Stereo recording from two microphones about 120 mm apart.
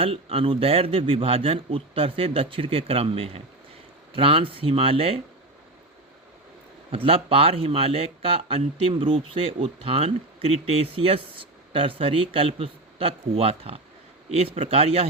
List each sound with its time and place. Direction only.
0.0 s speech: 50° right (ahead or behind)
6.9 s a man's voice: 50° right (ahead or behind)